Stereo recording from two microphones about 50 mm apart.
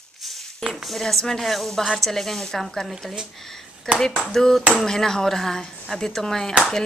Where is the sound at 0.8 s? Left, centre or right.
Centre.